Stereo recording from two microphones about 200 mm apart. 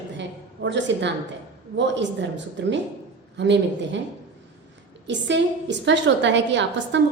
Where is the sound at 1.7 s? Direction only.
60° right (ahead or behind).